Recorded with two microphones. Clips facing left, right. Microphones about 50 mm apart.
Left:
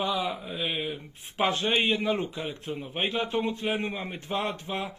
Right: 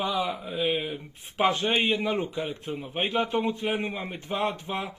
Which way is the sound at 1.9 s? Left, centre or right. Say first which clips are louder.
Even; centre.